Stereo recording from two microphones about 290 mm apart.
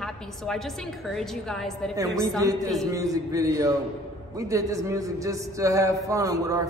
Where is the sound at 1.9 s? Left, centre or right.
Centre.